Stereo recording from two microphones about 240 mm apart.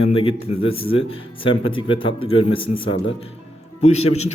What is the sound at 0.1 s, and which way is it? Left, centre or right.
Speech, left.